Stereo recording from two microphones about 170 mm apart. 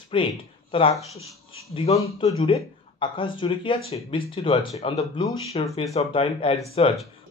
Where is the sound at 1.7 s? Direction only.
35° left (ahead or behind).